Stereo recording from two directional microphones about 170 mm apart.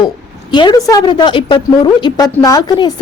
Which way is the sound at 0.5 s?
25° left (ahead or behind).